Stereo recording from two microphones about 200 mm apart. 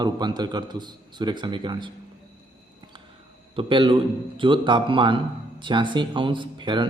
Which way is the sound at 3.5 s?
25° right (ahead or behind).